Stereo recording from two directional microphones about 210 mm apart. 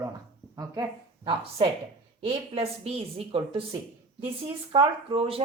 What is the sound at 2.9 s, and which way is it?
Speech, 30° right (ahead or behind).